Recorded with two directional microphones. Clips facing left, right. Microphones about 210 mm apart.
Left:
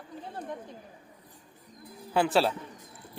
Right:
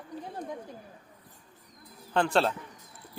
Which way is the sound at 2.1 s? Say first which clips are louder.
Left 1 dB; 5° left (ahead or behind).